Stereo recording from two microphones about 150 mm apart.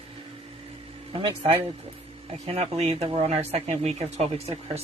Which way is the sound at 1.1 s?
40° right (ahead or behind).